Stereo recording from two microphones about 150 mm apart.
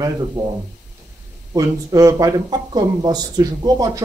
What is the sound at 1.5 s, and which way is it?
Speech, 25° right (ahead or behind).